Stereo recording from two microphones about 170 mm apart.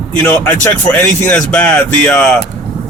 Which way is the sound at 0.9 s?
5° left (ahead or behind).